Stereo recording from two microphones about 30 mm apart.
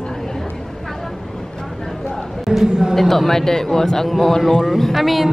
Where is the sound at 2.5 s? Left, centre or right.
Centre.